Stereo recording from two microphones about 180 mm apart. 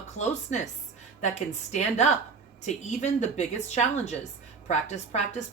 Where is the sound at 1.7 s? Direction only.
40° left (ahead or behind).